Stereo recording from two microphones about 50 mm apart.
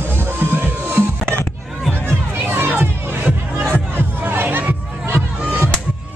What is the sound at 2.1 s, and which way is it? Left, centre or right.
Crowd, right.